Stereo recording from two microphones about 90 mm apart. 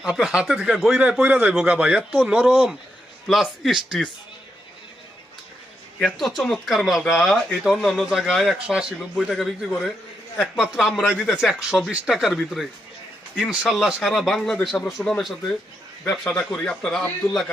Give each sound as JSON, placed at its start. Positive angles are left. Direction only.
{"t": 0.0, "sound": "speech", "side_deg": -10}
{"t": 1.2, "sound": "speech", "side_deg": -15}
{"t": 2.5, "sound": "speech", "side_deg": 0}
{"t": 6.0, "sound": "speech", "side_deg": 5}